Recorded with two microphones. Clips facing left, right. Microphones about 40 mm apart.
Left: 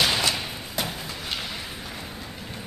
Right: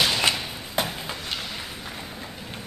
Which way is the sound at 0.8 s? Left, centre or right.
Right.